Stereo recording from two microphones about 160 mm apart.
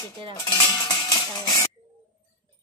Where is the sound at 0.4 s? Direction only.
25° left (ahead or behind).